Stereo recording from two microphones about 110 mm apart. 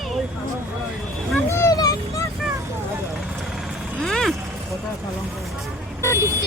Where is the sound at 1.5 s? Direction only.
25° left (ahead or behind).